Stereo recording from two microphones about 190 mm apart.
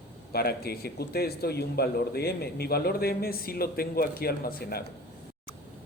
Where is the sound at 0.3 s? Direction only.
55° left (ahead or behind).